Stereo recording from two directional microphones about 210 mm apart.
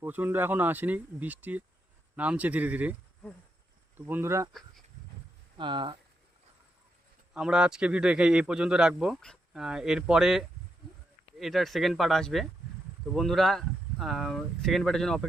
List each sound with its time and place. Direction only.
0.0 s speech: 10° right (ahead or behind)
3.9 s speech: 10° right (ahead or behind)
5.5 s speech: 20° right (ahead or behind)
7.3 s a man's voice: 5° right (ahead or behind)